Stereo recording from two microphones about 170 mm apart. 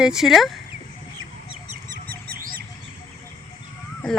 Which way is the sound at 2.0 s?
60° right (ahead or behind).